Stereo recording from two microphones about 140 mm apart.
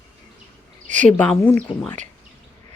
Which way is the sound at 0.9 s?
60° right (ahead or behind).